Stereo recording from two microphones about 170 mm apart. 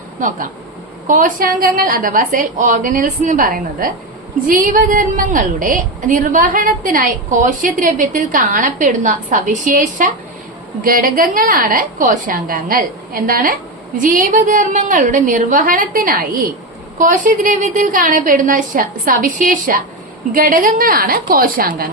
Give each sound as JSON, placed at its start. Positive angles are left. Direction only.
{"t": 0.2, "sound": "a woman's voice", "side_deg": -50}